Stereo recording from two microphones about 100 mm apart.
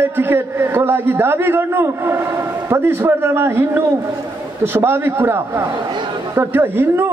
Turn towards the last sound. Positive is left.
turn(degrees=-25)  # may be behind; listen again after turning